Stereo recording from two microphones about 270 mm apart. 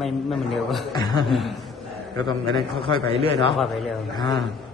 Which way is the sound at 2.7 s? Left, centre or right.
Centre.